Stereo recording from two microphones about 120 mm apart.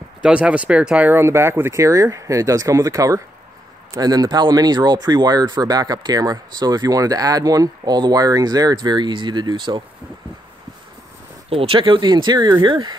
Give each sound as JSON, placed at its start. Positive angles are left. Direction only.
{"t": 0.2, "sound": "speech", "side_deg": -10}
{"t": 11.5, "sound": "speech", "side_deg": -50}